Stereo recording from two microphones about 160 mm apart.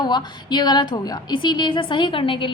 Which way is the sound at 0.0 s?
25° left (ahead or behind).